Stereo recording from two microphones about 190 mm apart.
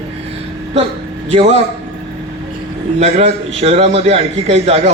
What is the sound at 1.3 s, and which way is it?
Speech, 35° right (ahead or behind).